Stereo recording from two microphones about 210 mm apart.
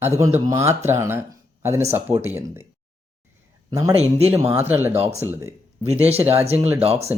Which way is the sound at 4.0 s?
30° right (ahead or behind).